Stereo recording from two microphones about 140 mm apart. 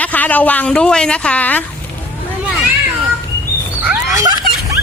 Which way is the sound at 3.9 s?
25° right (ahead or behind).